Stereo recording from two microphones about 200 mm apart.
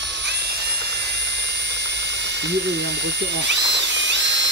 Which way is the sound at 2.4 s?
60° right (ahead or behind).